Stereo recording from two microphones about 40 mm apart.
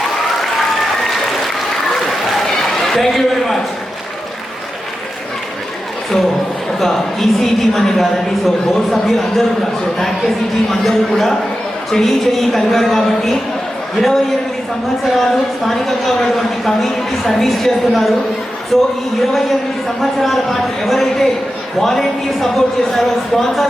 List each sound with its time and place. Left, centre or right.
2.6 s a man's voice: centre
6.7 s a woman's voice: centre